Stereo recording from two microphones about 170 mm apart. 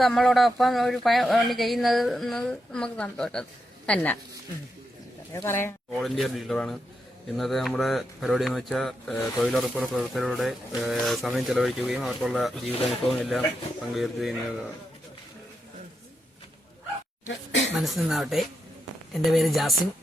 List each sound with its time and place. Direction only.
0.0 s a woman's voice: centre (ahead or behind)
5.3 s speech: 15° left (ahead or behind)
6.0 s speech: centre (ahead or behind)
17.2 s speech: 90° left
17.7 s speech: centre (ahead or behind)